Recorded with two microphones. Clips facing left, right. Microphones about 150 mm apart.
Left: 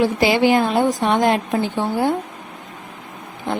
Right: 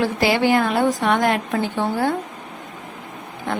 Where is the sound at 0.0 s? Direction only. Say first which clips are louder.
Left 3 dB; 20° left (ahead or behind).